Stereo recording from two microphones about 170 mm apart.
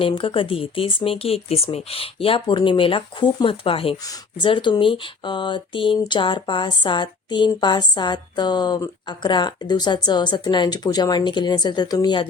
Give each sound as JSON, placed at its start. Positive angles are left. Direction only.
{"t": 0.0, "sound": "speech", "side_deg": 30}